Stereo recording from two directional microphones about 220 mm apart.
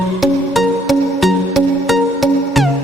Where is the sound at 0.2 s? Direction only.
Centre (ahead or behind).